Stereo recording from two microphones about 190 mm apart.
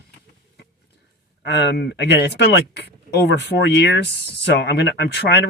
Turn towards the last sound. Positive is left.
turn(degrees=60)  # may be behind; listen again after turning